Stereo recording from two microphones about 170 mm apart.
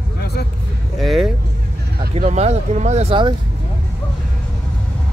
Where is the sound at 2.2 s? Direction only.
40° right (ahead or behind).